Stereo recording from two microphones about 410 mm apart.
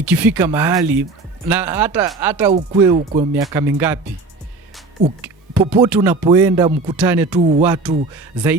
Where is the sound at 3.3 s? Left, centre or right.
Centre.